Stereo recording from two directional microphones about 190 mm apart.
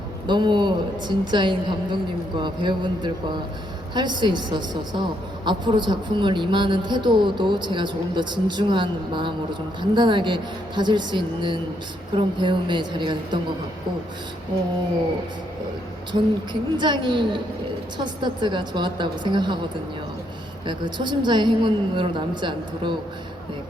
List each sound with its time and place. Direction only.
0.3 s speech: 25° right (ahead or behind)
16.1 s speech: 25° right (ahead or behind)
20.7 s speech: 25° right (ahead or behind)